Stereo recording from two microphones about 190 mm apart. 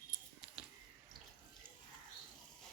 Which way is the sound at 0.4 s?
5° right (ahead or behind).